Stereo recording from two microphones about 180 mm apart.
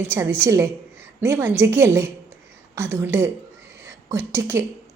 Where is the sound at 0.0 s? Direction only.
15° right (ahead or behind).